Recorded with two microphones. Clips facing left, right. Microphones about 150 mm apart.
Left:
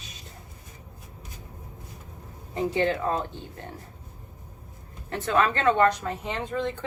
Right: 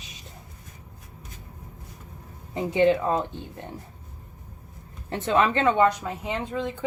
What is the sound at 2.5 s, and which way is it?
Speech, 15° right (ahead or behind).